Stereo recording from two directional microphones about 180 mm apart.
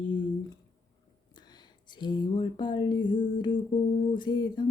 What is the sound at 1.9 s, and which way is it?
Humming, 25° left (ahead or behind).